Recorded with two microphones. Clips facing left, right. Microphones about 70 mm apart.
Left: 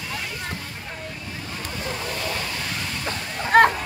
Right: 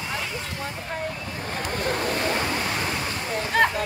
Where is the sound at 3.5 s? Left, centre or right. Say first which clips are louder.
Left 6 dB; left.